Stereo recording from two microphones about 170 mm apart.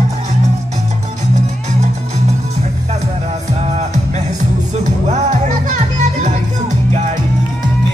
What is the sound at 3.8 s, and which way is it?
Music, 40° right (ahead or behind).